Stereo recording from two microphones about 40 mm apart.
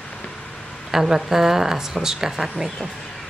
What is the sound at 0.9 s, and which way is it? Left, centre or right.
A woman's voice, centre.